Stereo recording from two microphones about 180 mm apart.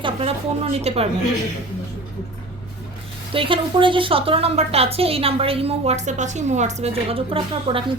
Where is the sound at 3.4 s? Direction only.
30° right (ahead or behind).